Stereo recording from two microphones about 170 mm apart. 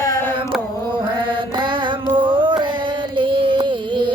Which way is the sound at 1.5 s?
30° right (ahead or behind).